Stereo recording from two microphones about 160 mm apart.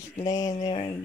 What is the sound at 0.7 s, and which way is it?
Speech, 35° left (ahead or behind).